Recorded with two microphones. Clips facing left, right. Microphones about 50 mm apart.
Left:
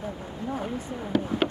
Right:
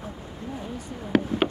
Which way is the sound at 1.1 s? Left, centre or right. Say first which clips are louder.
Right 4 dB; right.